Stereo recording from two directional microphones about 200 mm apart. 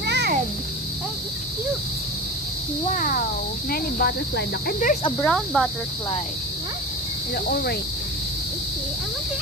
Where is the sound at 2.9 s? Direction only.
40° left (ahead or behind).